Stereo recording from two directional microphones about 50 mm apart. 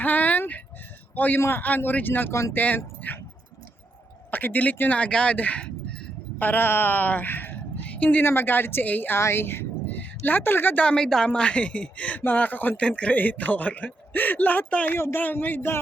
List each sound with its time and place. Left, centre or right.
0.0 s a sound: left
1.1 s a man's voice: left
4.3 s a man's voice: left
4.9 s speech: left
6.4 s a man's voice: left
7.9 s a sound: left
8.2 s a woman's voice: left
9.1 s a woman's voice: left
10.8 s a woman's voice: centre; by 12.7 s left
12.7 s speech: left
13.1 s a man's voice: left
14.8 s a woman's voice: left
15.2 s a man's voice: left